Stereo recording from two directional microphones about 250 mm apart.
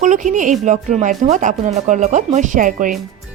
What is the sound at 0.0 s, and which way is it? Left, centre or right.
A woman's voice, right.